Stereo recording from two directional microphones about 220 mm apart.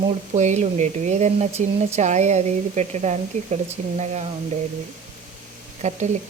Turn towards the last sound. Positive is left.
turn(degrees=-30)  # may be behind; listen again after turning